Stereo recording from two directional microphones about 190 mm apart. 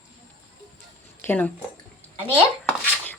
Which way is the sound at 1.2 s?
10° left (ahead or behind).